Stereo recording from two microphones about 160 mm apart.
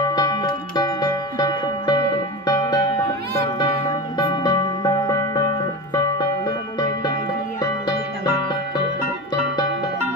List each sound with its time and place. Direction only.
0.1 s music: 25° left (ahead or behind)
4.2 s music: 25° left (ahead or behind)